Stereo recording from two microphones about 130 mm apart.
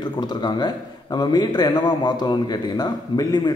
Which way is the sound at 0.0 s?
35° left (ahead or behind).